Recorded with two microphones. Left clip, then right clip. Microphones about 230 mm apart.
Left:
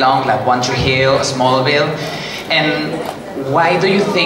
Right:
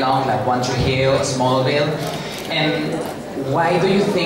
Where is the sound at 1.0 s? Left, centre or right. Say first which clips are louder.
Left 3 dB; left.